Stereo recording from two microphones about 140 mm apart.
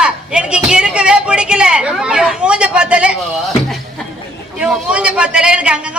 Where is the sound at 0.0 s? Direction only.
5° right (ahead or behind).